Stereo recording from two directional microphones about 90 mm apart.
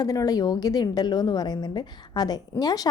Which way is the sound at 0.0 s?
45° left (ahead or behind).